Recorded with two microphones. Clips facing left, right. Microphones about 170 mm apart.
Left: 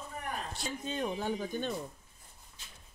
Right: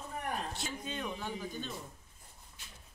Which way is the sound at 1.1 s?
50° left (ahead or behind).